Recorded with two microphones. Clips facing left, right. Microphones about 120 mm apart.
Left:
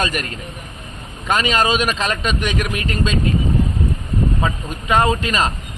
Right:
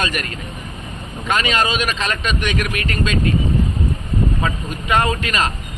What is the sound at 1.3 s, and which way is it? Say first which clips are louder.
Speech: left 2 dB; 40° left (ahead or behind).